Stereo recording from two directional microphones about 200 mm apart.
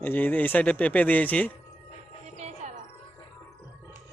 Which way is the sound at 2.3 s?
35° right (ahead or behind).